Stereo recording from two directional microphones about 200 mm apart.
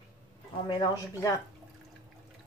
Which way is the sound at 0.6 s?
20° left (ahead or behind).